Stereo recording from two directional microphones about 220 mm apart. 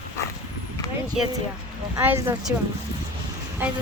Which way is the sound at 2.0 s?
10° right (ahead or behind).